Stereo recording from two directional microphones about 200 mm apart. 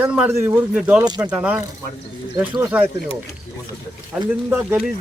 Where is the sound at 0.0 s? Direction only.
5° right (ahead or behind).